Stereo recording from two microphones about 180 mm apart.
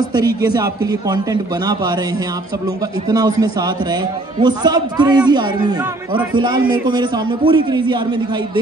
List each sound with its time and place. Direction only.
0.4 s a man's voice: 20° right (ahead or behind)
3.1 s a man's voice: 20° right (ahead or behind)